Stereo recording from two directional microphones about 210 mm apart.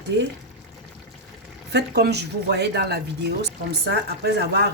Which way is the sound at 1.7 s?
50° right (ahead or behind).